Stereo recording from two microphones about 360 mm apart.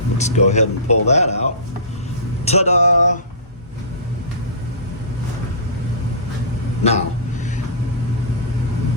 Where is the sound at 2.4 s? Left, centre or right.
Centre.